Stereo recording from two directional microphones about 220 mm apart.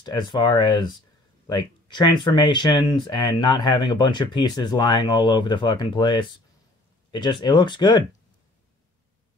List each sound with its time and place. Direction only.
0.0 s speech: 20° left (ahead or behind)